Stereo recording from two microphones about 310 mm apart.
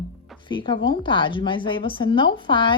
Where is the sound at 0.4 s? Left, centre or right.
Centre.